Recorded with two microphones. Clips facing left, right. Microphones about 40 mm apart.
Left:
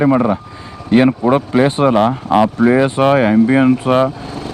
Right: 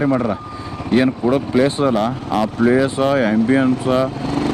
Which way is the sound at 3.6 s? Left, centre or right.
Left.